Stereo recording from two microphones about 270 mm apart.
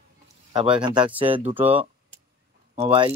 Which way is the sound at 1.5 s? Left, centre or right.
Centre.